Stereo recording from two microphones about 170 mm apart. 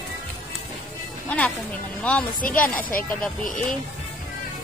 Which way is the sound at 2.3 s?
55° left (ahead or behind).